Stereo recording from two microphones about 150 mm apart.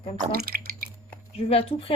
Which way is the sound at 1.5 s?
40° left (ahead or behind).